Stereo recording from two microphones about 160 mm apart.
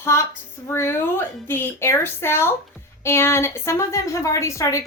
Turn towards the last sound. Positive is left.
turn(degrees=20)  # may be behind; listen again after turning